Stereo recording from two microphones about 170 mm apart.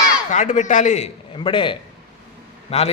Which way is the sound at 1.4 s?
30° left (ahead or behind).